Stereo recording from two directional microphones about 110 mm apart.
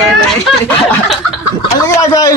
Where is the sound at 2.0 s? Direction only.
30° left (ahead or behind).